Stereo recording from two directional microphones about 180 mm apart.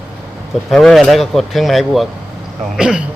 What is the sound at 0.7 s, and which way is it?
Speech, centre (ahead or behind).